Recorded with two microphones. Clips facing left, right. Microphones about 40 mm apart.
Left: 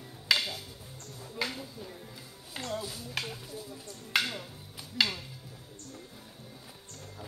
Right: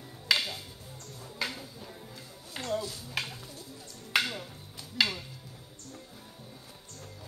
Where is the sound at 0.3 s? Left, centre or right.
Centre.